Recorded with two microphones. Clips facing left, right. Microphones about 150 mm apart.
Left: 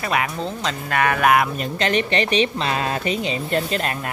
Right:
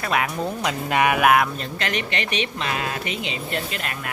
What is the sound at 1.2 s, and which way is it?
Speech, centre (ahead or behind).